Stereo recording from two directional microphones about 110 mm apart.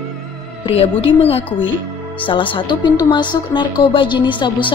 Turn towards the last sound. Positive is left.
turn(degrees=45)  # may be behind; listen again after turning